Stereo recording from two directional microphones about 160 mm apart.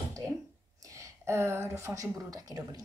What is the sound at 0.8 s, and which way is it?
A woman's voice, 20° right (ahead or behind).